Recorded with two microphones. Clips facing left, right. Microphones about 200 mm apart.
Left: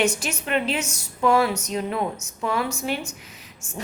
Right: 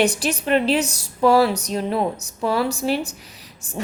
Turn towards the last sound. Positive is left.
turn(degrees=-35)  # may be behind; listen again after turning